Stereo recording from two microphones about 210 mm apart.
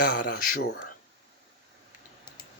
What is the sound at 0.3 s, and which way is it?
Speech, 50° left (ahead or behind).